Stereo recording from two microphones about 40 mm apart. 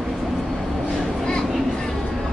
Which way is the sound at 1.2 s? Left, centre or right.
Centre.